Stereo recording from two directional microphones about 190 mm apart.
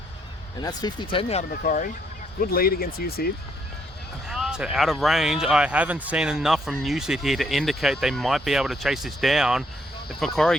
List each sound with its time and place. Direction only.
0.6 s speech: 20° left (ahead or behind); by 3.2 s 50° left (ahead or behind)
4.3 s speech: centre (ahead or behind)